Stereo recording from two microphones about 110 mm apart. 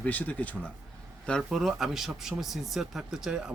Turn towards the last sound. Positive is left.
turn(degrees=-5)  # may be behind; listen again after turning